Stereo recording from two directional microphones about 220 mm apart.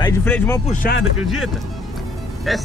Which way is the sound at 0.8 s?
45° left (ahead or behind).